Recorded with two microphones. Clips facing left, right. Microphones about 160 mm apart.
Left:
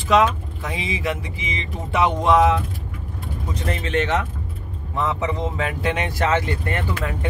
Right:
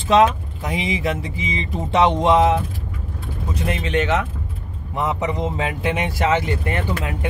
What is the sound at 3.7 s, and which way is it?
Speech, 15° right (ahead or behind).